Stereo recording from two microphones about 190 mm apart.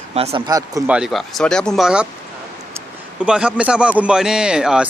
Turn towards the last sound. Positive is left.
turn(degrees=-5)  # may be behind; listen again after turning